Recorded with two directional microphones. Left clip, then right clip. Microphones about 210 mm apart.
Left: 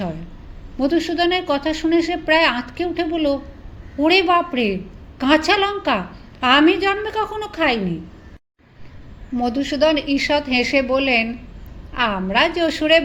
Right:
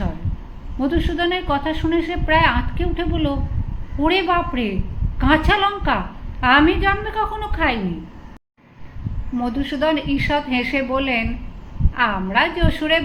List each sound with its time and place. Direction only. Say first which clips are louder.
0.8 s a woman's voice: left 2 dB; 35° left (ahead or behind)
9.4 s a woman's voice: left 4 dB; 35° left (ahead or behind)